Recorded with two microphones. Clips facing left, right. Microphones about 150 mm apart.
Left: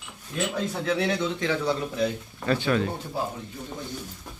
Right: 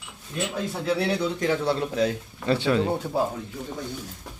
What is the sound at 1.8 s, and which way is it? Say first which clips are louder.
Speech: right 3 dB; 90° right.